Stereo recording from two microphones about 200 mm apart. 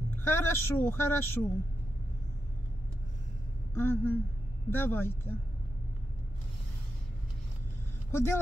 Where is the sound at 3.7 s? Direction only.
10° left (ahead or behind).